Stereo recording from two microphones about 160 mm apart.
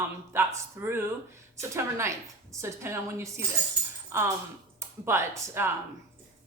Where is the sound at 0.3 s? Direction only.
15° right (ahead or behind).